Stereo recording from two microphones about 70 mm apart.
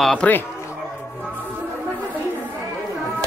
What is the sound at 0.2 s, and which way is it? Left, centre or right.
Speech, centre.